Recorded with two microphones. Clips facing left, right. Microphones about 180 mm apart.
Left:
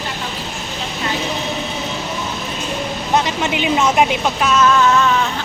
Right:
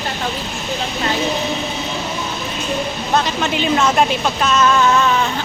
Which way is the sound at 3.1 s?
15° left (ahead or behind).